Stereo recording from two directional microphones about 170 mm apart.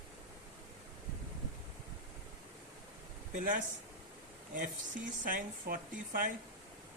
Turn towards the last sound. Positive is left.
turn(degrees=-55)  # may be behind; listen again after turning